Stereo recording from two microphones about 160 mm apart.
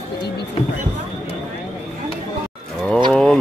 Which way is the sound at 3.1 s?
5° left (ahead or behind).